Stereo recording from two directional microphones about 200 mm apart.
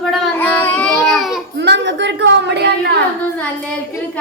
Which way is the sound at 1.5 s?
60° right (ahead or behind).